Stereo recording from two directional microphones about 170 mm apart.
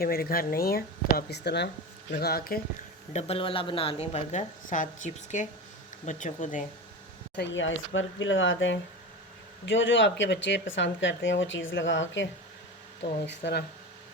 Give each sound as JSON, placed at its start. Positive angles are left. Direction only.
{"t": 0.0, "sound": "speech", "side_deg": 60}
{"t": 2.2, "sound": "speech", "side_deg": 65}
{"t": 3.1, "sound": "a woman's voice", "side_deg": 40}
{"t": 7.3, "sound": "speech", "side_deg": 90}